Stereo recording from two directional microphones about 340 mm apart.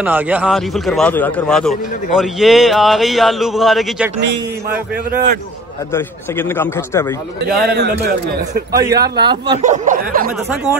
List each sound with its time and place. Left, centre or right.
0.0 s a man's voice: centre
5.1 s a man's voice: right
5.9 s a man's voice: centre
7.6 s a man's voice: right
8.7 s speech: centre